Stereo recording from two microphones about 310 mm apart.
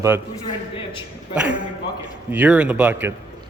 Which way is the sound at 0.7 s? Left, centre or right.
Centre.